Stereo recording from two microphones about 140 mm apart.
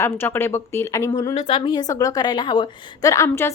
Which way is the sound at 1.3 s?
35° left (ahead or behind).